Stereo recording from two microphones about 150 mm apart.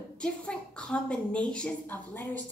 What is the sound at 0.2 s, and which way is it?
A woman's voice, 5° left (ahead or behind).